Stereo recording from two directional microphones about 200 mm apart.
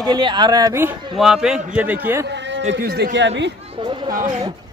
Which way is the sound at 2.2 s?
60° right (ahead or behind).